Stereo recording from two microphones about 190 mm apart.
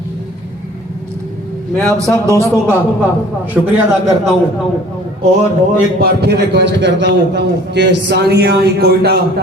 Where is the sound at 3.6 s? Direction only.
Centre (ahead or behind).